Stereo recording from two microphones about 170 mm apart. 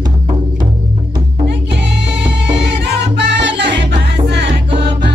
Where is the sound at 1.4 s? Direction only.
90° right.